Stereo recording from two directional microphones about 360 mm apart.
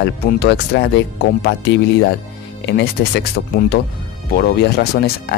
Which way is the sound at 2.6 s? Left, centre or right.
Left.